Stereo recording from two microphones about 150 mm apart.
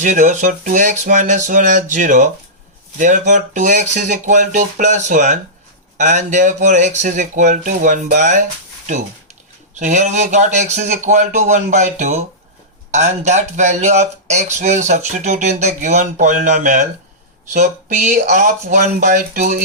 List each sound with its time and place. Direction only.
0.0 s speech: 55° right (ahead or behind)
9.7 s speech: 50° right (ahead or behind)